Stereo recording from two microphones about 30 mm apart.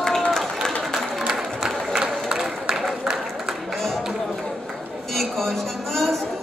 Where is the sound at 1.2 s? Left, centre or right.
Centre.